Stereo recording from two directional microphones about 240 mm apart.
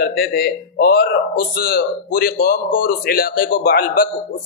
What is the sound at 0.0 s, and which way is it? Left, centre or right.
Speech, left.